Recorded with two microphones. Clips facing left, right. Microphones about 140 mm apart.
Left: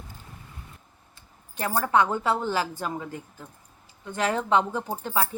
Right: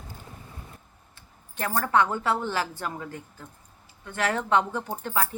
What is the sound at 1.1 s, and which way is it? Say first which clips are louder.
A woman's voice: left 1 dB; 20° left (ahead or behind).